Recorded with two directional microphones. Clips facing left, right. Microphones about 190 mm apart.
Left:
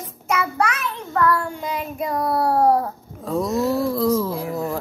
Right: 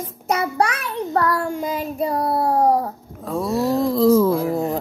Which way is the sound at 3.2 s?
Centre (ahead or behind).